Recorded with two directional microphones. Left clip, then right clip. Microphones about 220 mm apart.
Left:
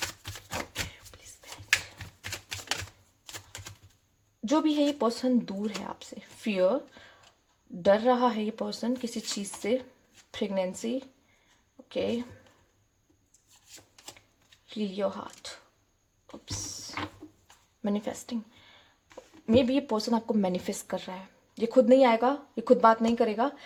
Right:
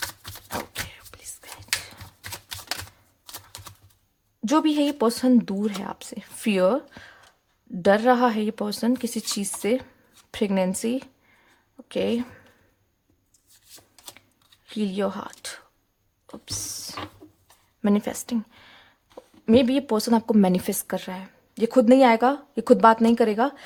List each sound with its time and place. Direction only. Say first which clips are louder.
4.4 s speech: right 4 dB; 25° right (ahead or behind)
10.3 s speech: right 6 dB; 25° right (ahead or behind)
14.7 s speech: right 4 dB; 25° right (ahead or behind)
16.3 s a sound: right 5 dB; 30° right (ahead or behind)
17.8 s speech: right 7 dB; 25° right (ahead or behind)